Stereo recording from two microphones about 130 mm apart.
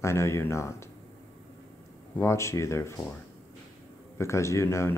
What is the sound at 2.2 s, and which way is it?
Speech, 20° left (ahead or behind).